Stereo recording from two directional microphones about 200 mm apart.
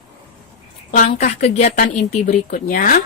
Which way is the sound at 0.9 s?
35° left (ahead or behind).